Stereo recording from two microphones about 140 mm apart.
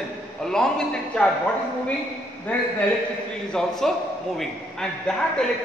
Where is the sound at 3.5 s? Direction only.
5° left (ahead or behind).